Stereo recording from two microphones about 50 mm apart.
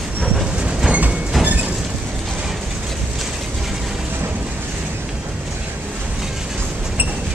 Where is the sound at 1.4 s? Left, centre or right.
Right.